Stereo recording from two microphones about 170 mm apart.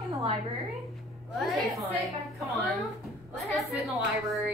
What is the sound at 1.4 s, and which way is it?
Speech, centre (ahead or behind).